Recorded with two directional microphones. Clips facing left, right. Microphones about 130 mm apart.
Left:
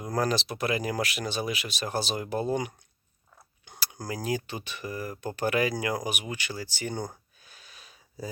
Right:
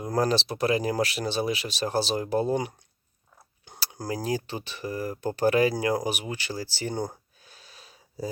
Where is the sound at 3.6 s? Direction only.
35° right (ahead or behind).